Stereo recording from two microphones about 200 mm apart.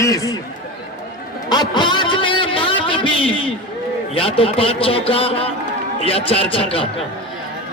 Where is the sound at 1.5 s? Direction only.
20° left (ahead or behind).